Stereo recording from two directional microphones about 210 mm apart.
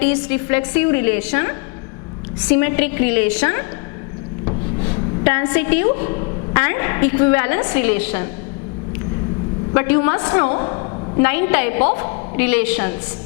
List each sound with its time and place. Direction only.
0.0 s a woman's voice: 10° left (ahead or behind)
4.4 s rub: 30° left (ahead or behind)
5.2 s a woman's voice: 10° left (ahead or behind)
9.7 s a woman's voice: 10° left (ahead or behind)